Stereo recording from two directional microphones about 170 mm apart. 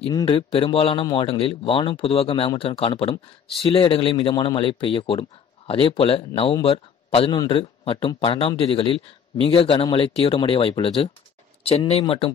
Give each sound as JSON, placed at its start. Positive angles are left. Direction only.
{"t": 0.2, "sound": "a man's voice", "side_deg": 35}